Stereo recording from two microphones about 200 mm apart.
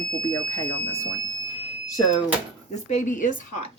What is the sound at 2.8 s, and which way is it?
Speech, 40° left (ahead or behind).